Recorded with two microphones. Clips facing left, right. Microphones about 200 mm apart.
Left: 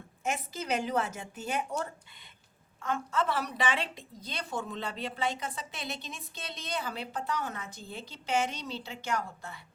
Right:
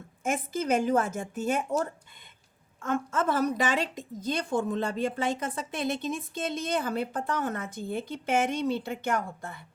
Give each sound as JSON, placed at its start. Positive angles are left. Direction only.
{"t": 0.2, "sound": "a woman's voice", "side_deg": -50}